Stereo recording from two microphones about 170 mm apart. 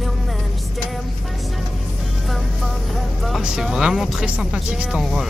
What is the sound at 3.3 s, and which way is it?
Speech, 5° right (ahead or behind).